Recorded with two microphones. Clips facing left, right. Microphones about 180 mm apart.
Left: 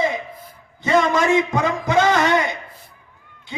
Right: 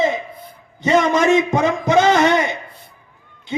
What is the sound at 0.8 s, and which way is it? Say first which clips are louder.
A man's voice: right 3 dB; 20° right (ahead or behind).